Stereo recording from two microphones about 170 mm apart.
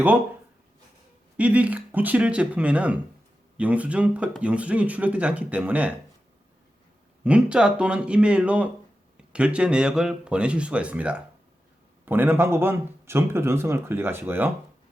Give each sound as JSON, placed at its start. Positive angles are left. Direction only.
{"t": 1.4, "sound": "speech", "side_deg": -10}
{"t": 7.3, "sound": "speech", "side_deg": -5}